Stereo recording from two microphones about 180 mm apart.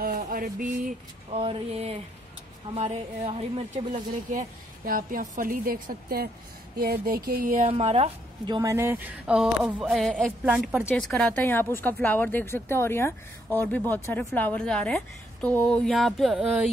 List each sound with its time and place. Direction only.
0.0 s mantra: 55° right (ahead or behind)
1.3 s a woman's voice: 30° right (ahead or behind)
4.3 s a woman's voice: 50° right (ahead or behind)
7.7 s a woman's voice: 35° right (ahead or behind)
8.5 s speech: 15° right (ahead or behind)